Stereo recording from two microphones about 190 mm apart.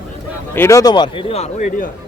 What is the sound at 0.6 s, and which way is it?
Speech, 15° left (ahead or behind).